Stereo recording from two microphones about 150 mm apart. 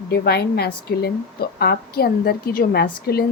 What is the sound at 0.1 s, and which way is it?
A woman's voice, 90° left.